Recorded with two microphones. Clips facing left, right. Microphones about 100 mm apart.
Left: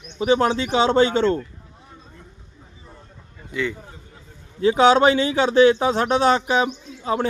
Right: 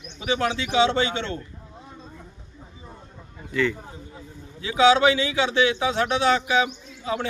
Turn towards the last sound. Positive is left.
turn(degrees=40)  # may be behind; listen again after turning